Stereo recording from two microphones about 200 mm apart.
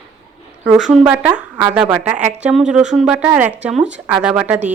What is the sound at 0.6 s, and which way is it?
A woman's voice, centre (ahead or behind).